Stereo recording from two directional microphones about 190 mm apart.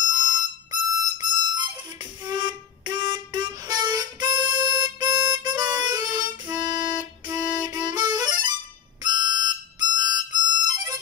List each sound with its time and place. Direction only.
0.1 s harmonica: 20° right (ahead or behind)
6.6 s music: 25° right (ahead or behind)
9.0 s harmonica: 20° right (ahead or behind)